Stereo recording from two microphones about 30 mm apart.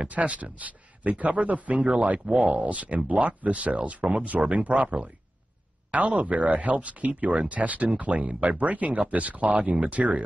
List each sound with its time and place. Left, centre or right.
0.0 s speech: right
6.1 s speech: right